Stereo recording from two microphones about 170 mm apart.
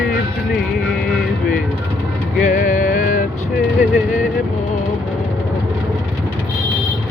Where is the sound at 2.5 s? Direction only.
50° left (ahead or behind).